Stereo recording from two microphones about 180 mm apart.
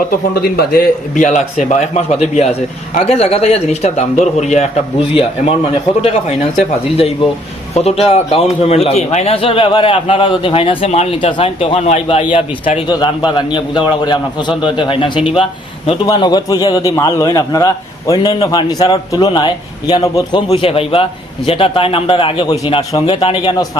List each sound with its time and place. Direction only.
0.4 s a man's voice: 60° left (ahead or behind); by 4.7 s 40° left (ahead or behind)
6.0 s a man's voice: 35° left (ahead or behind)